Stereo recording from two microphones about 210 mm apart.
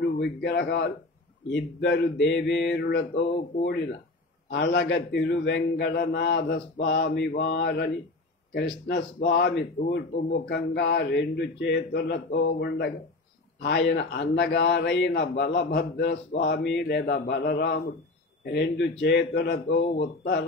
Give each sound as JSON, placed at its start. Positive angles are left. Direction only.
{"t": 0.1, "sound": "a man's voice", "side_deg": 55}
{"t": 4.5, "sound": "a man's voice", "side_deg": 50}